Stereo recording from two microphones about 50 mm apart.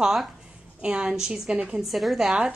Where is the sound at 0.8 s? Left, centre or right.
Centre.